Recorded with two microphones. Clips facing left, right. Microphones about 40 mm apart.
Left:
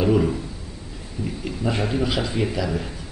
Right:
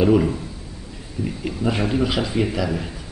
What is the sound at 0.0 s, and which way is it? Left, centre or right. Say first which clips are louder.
A man's voice: right 3 dB; centre.